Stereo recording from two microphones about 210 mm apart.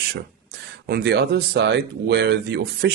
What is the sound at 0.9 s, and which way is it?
Speech, 50° right (ahead or behind).